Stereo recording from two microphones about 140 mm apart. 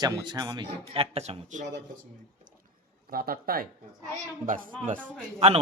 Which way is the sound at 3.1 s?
90° right.